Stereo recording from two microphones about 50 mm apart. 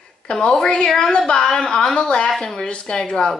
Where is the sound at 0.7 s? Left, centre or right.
Centre.